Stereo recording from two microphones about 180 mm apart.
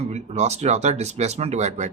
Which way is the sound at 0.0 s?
40° right (ahead or behind).